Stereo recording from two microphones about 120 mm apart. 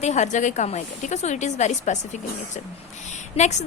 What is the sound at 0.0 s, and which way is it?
A woman's voice, 75° left (ahead or behind).